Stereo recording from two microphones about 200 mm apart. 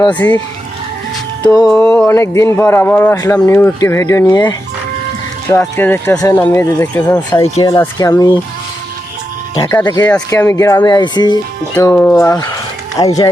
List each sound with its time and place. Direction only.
0.2 s speech: 10° left (ahead or behind)
1.5 s speech: 20° left (ahead or behind)
5.5 s speech: 15° left (ahead or behind)
9.8 s speech: 20° left (ahead or behind)
10.1 s speech: 10° left (ahead or behind)
11.7 s speech: 10° left (ahead or behind)